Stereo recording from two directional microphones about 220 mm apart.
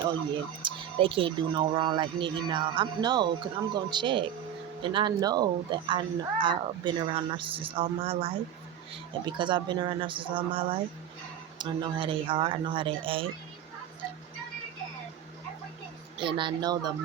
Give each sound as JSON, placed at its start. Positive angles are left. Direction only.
{"t": 0.6, "sound": "speech", "side_deg": -25}
{"t": 16.2, "sound": "speech", "side_deg": -20}